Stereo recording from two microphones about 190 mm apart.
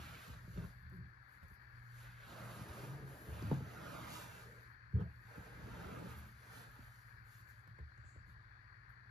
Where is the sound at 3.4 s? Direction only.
Centre (ahead or behind).